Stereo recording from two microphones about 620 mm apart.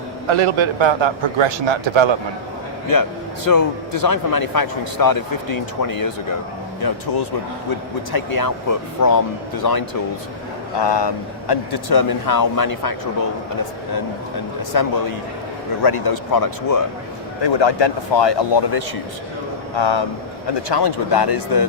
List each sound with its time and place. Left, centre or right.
0.3 s a man's voice: right
2.9 s speech: left
8.1 s speech: left
14.7 s speech: left
17.4 s speech: left